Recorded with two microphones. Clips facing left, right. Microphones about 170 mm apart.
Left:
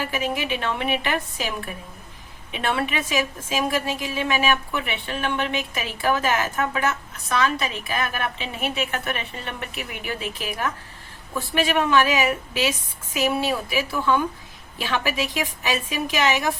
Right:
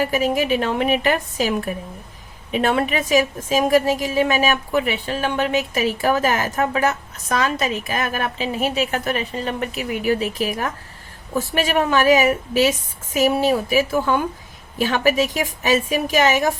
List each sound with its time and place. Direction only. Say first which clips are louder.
0.0 s a woman's voice: right 7 dB; 40° right (ahead or behind)